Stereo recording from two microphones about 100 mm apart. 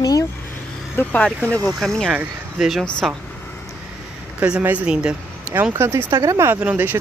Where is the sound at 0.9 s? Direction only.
15° left (ahead or behind).